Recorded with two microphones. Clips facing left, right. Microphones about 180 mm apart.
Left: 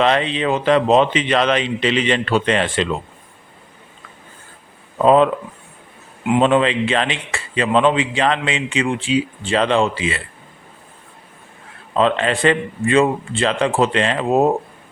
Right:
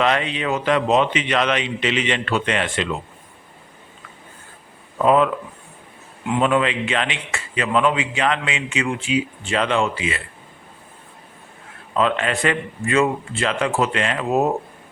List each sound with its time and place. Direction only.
0.0 s a man's voice: 30° left (ahead or behind)
4.9 s speech: 30° left (ahead or behind)
6.4 s a man's voice: 30° left (ahead or behind)
11.9 s a man's voice: 30° left (ahead or behind)